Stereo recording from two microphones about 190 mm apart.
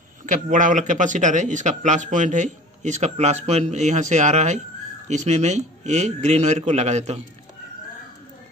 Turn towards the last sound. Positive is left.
turn(degrees=-35)  # may be behind; listen again after turning